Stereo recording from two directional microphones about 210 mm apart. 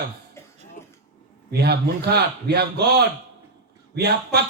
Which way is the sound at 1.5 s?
50° right (ahead or behind).